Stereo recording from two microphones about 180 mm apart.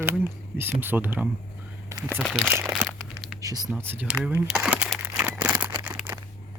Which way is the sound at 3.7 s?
10° right (ahead or behind).